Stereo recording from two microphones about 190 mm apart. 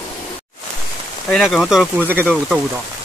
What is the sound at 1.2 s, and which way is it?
Speech, centre (ahead or behind).